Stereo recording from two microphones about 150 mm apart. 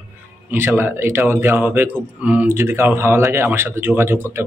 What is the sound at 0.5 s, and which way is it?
Speech, 15° right (ahead or behind).